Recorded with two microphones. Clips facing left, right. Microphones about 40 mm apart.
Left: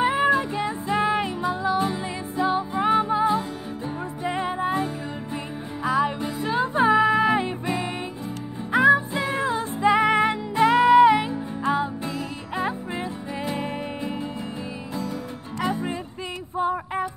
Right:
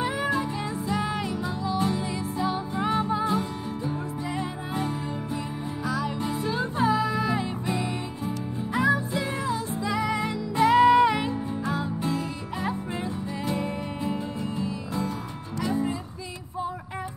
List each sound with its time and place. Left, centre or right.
0.6 s music: left; by 3.9 s centre
4.3 s music: left
5.9 s music: left
8.7 s music: left
10.5 s music: centre
11.6 s music: left
15.6 s music: left
16.5 s a sound: left